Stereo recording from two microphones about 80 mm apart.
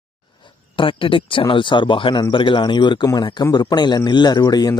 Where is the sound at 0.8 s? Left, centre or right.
Left.